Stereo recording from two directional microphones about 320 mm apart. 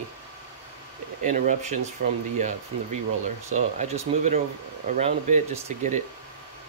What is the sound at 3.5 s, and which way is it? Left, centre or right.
Speech, right.